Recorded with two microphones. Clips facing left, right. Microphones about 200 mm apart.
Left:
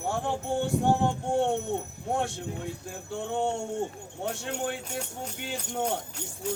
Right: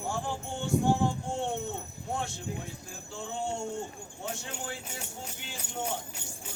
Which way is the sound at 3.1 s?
60° left (ahead or behind).